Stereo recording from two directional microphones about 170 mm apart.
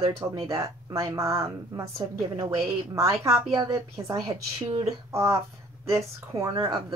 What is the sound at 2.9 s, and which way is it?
A woman's voice, 15° right (ahead or behind).